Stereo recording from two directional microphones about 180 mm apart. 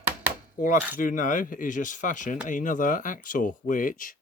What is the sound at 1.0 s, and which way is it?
Speech, 45° left (ahead or behind).